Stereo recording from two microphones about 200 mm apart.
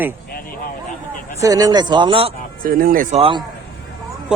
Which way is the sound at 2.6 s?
45° right (ahead or behind).